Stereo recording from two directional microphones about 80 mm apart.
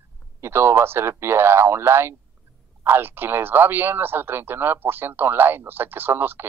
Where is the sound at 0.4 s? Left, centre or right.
Right.